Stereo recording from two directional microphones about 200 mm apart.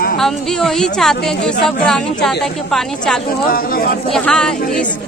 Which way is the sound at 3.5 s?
45° left (ahead or behind).